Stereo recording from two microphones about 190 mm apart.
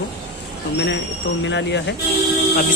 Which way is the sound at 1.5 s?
65° left (ahead or behind).